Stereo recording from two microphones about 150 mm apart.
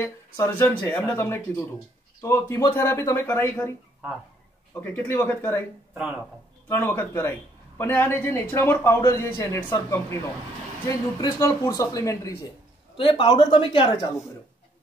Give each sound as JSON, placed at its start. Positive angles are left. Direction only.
{"t": 0.0, "sound": "a man's voice", "side_deg": 15}
{"t": 4.7, "sound": "a man's voice", "side_deg": 15}
{"t": 5.9, "sound": "speech", "side_deg": -10}
{"t": 6.7, "sound": "a man's voice", "side_deg": 15}
{"t": 12.9, "sound": "speech", "side_deg": 35}